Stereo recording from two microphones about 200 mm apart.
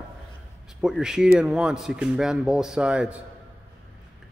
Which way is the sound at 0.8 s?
Centre (ahead or behind).